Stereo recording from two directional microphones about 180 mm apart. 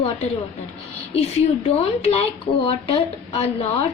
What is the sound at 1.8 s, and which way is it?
A woman's voice, 35° left (ahead or behind).